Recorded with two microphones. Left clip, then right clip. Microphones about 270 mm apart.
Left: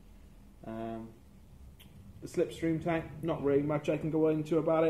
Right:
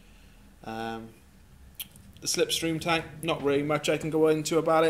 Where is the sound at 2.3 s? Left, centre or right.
Centre.